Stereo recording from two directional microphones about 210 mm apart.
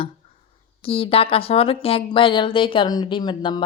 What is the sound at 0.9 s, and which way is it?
Speech, 25° left (ahead or behind).